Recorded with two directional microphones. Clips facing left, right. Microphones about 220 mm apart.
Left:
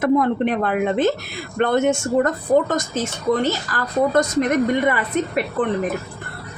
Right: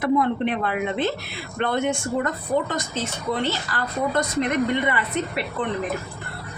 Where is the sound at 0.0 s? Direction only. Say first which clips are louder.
Left 3 dB; 45° left (ahead or behind).